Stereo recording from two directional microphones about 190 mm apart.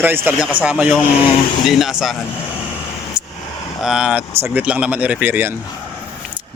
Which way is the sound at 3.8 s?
5° right (ahead or behind).